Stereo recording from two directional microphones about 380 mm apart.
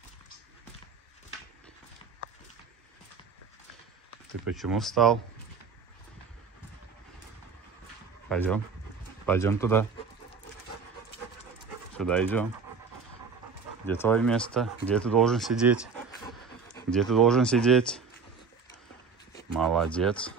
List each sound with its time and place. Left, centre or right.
4.6 s speech: centre
8.3 s speech: centre
12.0 s speech: centre
13.8 s speech: centre
16.1 s a sound: centre
19.5 s speech: centre